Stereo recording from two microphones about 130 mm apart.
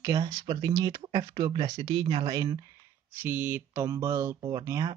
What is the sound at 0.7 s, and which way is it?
Speech, 25° right (ahead or behind).